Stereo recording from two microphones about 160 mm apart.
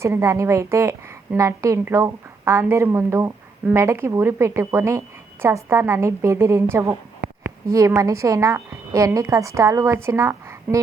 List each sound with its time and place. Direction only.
0.0 s a woman's voice: 15° right (ahead or behind)